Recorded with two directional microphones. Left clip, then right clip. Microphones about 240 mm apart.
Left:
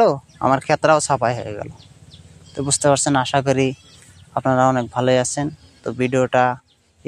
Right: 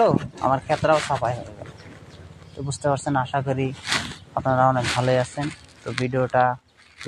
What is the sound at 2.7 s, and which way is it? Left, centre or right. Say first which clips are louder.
Speech: left 7 dB; left.